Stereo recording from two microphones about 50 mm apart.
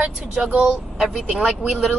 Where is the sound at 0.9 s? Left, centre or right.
Centre.